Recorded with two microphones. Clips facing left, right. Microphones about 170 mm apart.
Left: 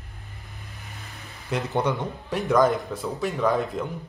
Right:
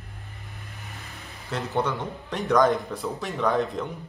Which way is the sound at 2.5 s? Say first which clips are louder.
Even; 5° left (ahead or behind).